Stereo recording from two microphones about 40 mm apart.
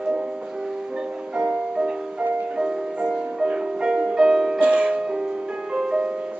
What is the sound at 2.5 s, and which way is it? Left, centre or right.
Music, right.